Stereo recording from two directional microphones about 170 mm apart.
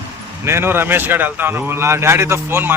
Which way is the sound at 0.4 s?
15° right (ahead or behind).